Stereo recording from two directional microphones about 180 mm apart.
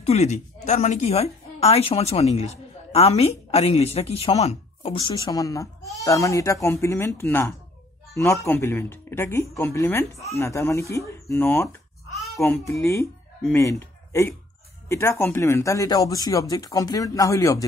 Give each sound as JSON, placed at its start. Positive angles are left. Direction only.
{"t": 0.0, "sound": "a woman's voice", "side_deg": 35}